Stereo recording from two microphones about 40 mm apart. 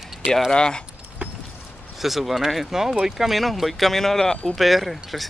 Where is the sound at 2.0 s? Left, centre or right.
Centre.